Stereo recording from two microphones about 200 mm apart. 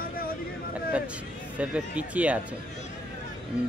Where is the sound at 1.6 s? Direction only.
5° right (ahead or behind).